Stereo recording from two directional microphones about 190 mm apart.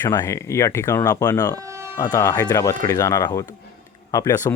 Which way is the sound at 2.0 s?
20° left (ahead or behind).